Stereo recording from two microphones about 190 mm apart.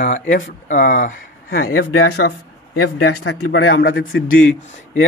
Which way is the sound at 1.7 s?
75° left (ahead or behind).